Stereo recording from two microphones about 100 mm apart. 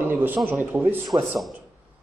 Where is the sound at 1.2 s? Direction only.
Centre (ahead or behind).